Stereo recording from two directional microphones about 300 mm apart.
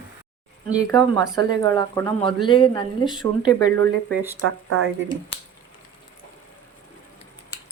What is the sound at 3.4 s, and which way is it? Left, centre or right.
Speech, centre.